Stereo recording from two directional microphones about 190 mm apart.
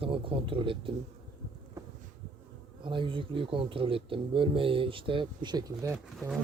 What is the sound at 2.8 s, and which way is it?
Speech, 25° right (ahead or behind).